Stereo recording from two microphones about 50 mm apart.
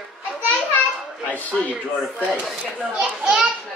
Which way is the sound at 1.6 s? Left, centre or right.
Centre.